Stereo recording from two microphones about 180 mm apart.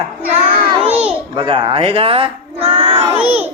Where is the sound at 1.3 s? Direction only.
30° right (ahead or behind).